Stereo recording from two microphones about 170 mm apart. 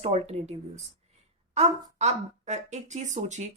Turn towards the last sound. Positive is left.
turn(degrees=-45)  # may be behind; listen again after turning